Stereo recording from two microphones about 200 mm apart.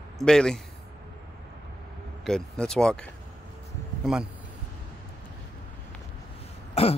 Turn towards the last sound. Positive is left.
turn(degrees=30)  # may be behind; listen again after turning